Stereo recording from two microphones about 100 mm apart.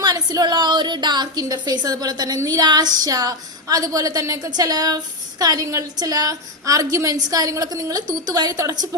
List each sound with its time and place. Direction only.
0.0 s a woman's voice: 40° right (ahead or behind)